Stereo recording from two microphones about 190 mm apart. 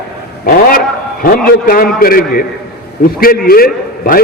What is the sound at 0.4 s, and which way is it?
A man's voice, 50° left (ahead or behind).